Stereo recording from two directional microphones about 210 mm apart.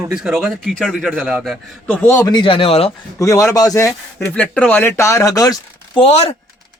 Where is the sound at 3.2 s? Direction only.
15° left (ahead or behind).